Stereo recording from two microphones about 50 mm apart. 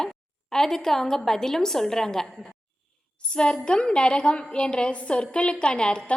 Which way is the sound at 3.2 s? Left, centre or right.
Centre.